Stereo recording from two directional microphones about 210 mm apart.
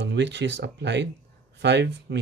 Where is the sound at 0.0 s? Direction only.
55° right (ahead or behind).